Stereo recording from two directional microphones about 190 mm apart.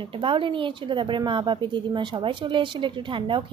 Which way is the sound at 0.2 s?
25° right (ahead or behind).